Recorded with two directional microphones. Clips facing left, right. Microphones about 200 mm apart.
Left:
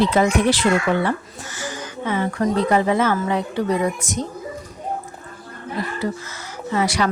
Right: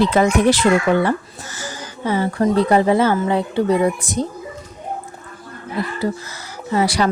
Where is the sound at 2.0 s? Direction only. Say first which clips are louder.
Right 3 dB; 35° right (ahead or behind).